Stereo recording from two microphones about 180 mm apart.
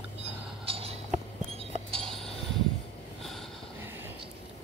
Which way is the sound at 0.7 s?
35° right (ahead or behind).